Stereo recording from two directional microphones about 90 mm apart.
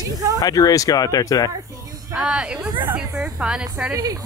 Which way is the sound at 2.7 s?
55° right (ahead or behind).